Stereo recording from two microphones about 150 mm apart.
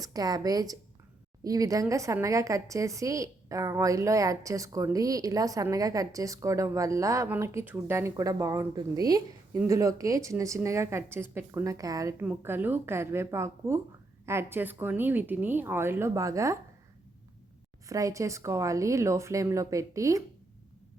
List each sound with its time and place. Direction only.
0.0 s a woman's voice: 25° right (ahead or behind)
12.2 s a woman's voice: 10° right (ahead or behind)
17.8 s a woman's voice: 20° right (ahead or behind)